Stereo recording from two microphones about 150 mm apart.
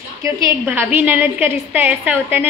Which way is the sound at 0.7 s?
10° right (ahead or behind).